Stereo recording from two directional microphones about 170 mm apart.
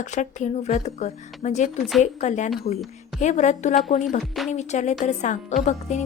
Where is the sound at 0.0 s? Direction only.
45° left (ahead or behind).